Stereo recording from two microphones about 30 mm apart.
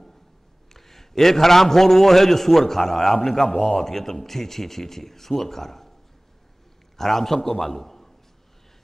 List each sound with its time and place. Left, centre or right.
0.7 s a man's voice: centre
7.0 s a man's voice: centre